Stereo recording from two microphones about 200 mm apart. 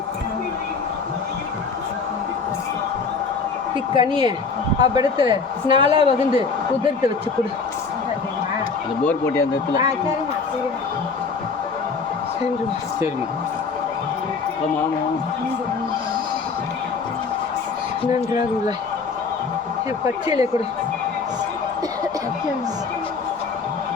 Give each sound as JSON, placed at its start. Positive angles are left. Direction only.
{"t": 3.9, "sound": "a woman's voice", "side_deg": -25}
{"t": 9.0, "sound": "speech", "side_deg": 15}
{"t": 20.2, "sound": "speech", "side_deg": -15}